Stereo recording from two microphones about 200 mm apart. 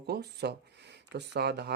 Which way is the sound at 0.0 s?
55° right (ahead or behind).